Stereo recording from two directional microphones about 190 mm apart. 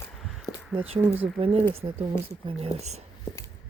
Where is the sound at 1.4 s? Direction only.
30° right (ahead or behind).